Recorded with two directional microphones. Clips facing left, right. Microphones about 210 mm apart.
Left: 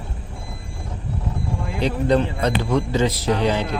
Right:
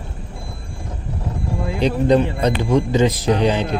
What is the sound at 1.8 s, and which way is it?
A man's voice, 20° right (ahead or behind).